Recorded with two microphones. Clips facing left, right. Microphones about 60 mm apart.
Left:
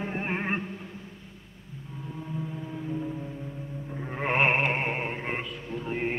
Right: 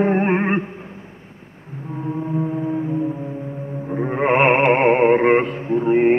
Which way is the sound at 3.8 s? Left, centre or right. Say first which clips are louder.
Right 12 dB; right.